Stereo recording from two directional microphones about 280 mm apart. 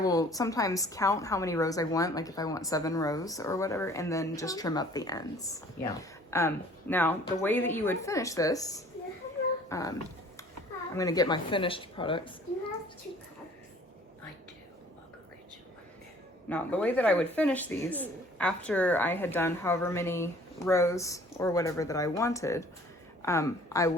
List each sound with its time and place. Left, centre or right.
0.0 s speech: centre
9.6 s dog: centre
10.9 s speech: centre
16.5 s speech: centre